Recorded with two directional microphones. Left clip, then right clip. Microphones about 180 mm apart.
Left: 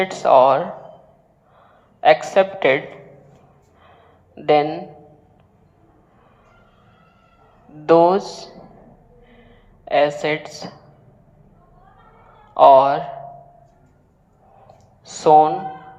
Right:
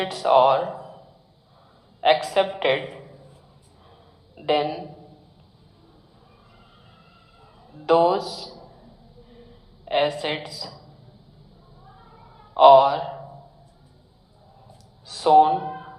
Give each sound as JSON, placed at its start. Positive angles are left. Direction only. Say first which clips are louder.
{"t": 0.0, "sound": "a woman's voice", "louder": "left 4 dB", "side_deg": 20}
{"t": 2.0, "sound": "a woman's voice", "louder": "left 5 dB", "side_deg": 20}
{"t": 4.4, "sound": "a woman's voice", "louder": "left 6 dB", "side_deg": 20}
{"t": 7.9, "sound": "a woman's voice", "louder": "left 5 dB", "side_deg": 20}
{"t": 9.8, "sound": "a woman's voice", "louder": "left 5 dB", "side_deg": 20}
{"t": 12.5, "sound": "a woman's voice", "louder": "left 2 dB", "side_deg": 20}
{"t": 15.0, "sound": "a woman's voice", "louder": "left 3 dB", "side_deg": 20}